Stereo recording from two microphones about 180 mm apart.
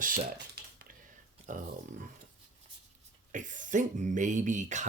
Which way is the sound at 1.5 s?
45° right (ahead or behind).